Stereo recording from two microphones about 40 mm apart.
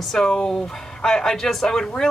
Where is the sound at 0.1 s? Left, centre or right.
Centre.